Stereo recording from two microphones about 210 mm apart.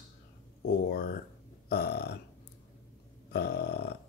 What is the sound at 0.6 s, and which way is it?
Speech, 45° left (ahead or behind).